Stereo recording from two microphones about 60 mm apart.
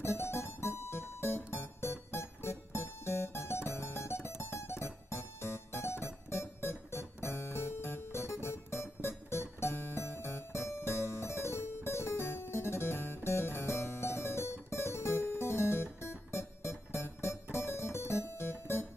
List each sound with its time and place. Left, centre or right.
0.0 s music: left